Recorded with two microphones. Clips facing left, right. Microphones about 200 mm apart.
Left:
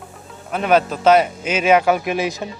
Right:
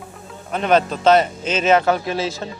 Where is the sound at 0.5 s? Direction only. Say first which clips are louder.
Left 1 dB; 5° left (ahead or behind).